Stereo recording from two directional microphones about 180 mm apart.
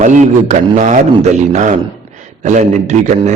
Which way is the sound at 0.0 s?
40° right (ahead or behind).